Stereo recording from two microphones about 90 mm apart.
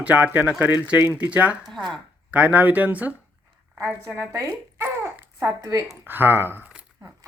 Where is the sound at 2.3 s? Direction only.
20° right (ahead or behind).